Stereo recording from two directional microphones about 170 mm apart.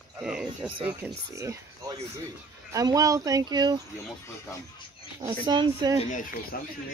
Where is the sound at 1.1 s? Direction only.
20° right (ahead or behind).